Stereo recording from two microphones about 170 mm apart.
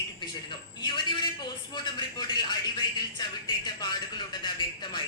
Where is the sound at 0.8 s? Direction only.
25° left (ahead or behind).